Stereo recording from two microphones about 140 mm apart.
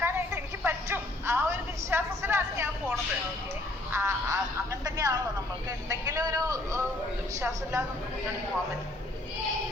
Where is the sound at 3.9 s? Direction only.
20° right (ahead or behind).